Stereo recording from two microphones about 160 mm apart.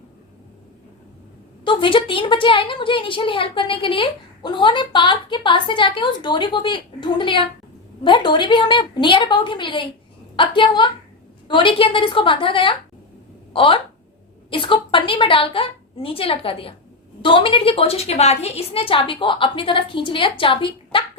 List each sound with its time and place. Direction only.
1.6 s a woman's voice: 30° left (ahead or behind)